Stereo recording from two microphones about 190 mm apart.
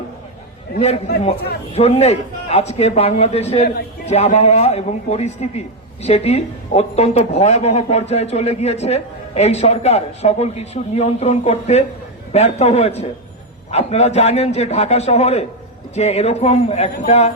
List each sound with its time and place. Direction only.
0.8 s a man's voice: 35° left (ahead or behind)